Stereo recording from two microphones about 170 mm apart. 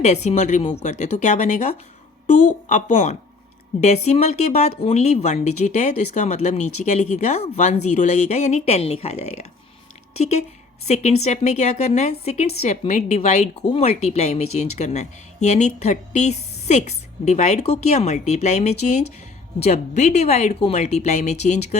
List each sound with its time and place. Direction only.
0.0 s a woman's voice: 40° left (ahead or behind)